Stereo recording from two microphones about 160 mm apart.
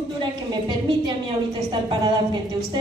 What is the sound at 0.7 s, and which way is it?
A woman's voice, 25° right (ahead or behind).